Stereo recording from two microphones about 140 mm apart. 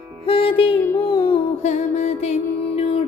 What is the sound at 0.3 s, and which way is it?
Music, 40° left (ahead or behind).